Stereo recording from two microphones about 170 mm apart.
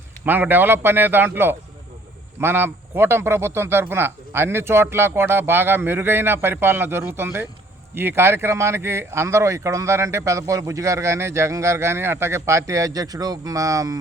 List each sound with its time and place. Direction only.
0.3 s speech: 10° right (ahead or behind)